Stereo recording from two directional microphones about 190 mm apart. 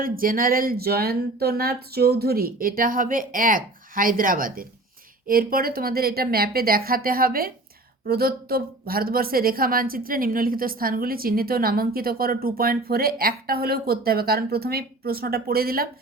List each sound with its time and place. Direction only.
0.0 s speech: 50° right (ahead or behind)